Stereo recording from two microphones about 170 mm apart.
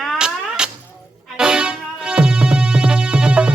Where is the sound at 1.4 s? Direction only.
5° right (ahead or behind).